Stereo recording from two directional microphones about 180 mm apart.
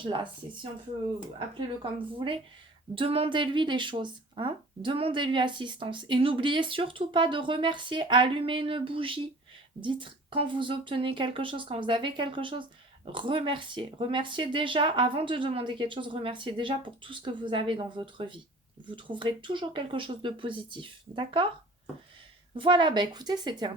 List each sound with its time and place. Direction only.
0.0 s a woman's voice: 25° right (ahead or behind)
22.5 s a woman's voice: 30° right (ahead or behind)